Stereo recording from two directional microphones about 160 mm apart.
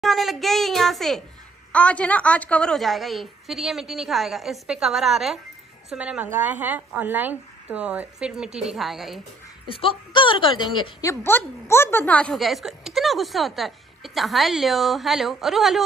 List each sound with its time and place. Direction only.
0.0 s a woman's voice: centre (ahead or behind)
9.7 s a woman's voice: 35° left (ahead or behind)
11.1 s a woman's voice: 15° left (ahead or behind); by 15.8 s centre (ahead or behind)